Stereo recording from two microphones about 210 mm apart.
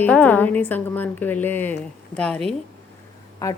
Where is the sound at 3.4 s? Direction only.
15° left (ahead or behind).